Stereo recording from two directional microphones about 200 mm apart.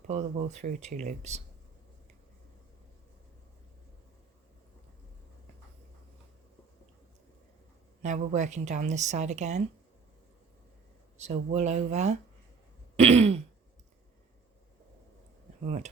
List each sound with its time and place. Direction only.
0.1 s speech: 35° right (ahead or behind)
8.0 s speech: 35° right (ahead or behind)
11.2 s speech: 35° right (ahead or behind)
15.6 s speech: 35° right (ahead or behind)